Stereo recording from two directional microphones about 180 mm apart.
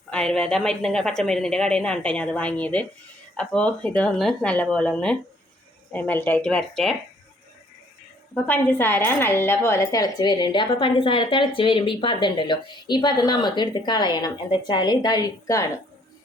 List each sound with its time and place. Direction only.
0.1 s a woman's voice: 5° left (ahead or behind)
8.4 s speech: 10° left (ahead or behind)